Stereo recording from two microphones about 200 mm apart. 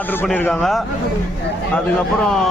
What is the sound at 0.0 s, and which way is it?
A man's voice, 10° left (ahead or behind).